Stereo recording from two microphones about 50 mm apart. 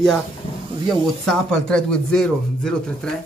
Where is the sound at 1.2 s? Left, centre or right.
Centre.